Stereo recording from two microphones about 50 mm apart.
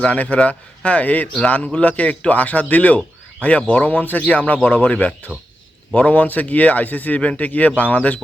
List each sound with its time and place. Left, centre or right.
0.0 s a man's voice: left